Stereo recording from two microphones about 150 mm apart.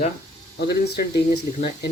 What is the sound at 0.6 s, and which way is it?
Speech, 90° left.